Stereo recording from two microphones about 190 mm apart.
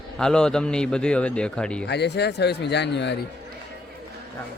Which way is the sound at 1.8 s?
60° left (ahead or behind).